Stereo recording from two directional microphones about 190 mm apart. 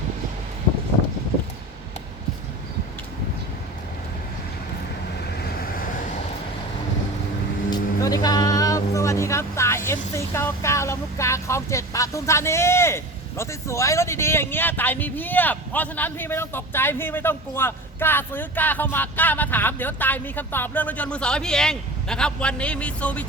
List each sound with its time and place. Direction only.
5.4 s vehicle: 50° left (ahead or behind)
7.7 s speech: 20° left (ahead or behind)